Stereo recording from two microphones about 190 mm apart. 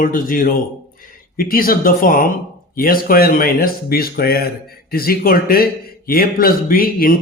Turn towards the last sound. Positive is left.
turn(degrees=50)  # may be behind; listen again after turning